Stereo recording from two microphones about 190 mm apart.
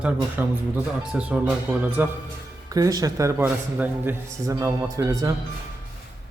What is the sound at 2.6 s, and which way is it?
Speech, 20° right (ahead or behind).